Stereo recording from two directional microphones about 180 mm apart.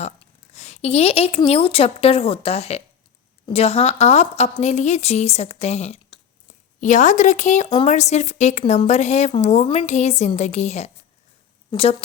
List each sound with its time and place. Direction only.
0.0 s a woman's voice: 35° left (ahead or behind)